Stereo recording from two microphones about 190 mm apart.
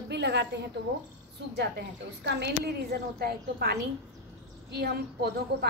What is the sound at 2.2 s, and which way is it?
A woman's voice, 60° right (ahead or behind).